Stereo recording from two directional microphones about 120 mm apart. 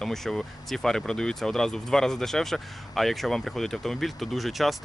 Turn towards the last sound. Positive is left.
turn(degrees=0)  # may be behind; listen again after turning